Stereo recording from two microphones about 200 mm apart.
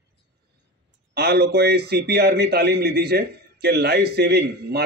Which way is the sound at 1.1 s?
50° right (ahead or behind).